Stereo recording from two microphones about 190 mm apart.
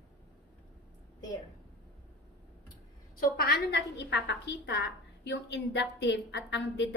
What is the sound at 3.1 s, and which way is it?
A woman's voice, 55° left (ahead or behind).